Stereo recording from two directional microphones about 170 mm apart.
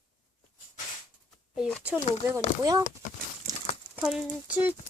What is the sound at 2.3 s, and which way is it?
Speech, 20° right (ahead or behind).